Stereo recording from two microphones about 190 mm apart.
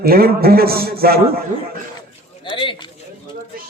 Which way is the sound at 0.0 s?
50° right (ahead or behind).